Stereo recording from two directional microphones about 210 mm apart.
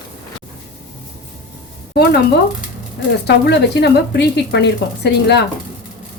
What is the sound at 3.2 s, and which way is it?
Speech, 55° left (ahead or behind).